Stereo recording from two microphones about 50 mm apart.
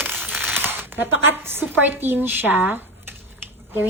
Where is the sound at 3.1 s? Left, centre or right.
Right.